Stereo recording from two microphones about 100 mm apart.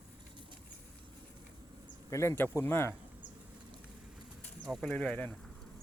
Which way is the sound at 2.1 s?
30° left (ahead or behind).